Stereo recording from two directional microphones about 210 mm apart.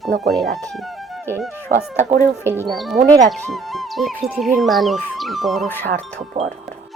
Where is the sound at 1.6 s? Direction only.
35° right (ahead or behind).